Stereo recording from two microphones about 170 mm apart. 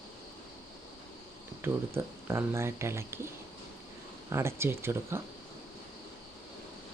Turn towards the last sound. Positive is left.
turn(degrees=-15)  # may be behind; listen again after turning